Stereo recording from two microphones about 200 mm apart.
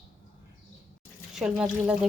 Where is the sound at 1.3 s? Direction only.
5° right (ahead or behind).